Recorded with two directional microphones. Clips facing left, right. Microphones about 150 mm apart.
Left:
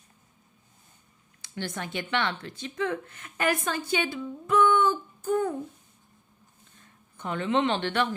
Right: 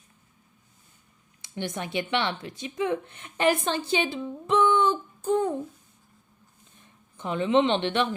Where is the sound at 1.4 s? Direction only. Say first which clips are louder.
Right 2 dB; 20° right (ahead or behind).